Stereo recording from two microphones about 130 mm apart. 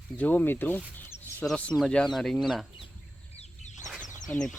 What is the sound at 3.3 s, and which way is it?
Bird, 60° left (ahead or behind).